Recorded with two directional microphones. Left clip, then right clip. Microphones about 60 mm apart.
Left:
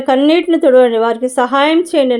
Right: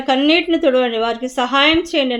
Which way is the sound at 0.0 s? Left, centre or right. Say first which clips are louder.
Left 3 dB; left.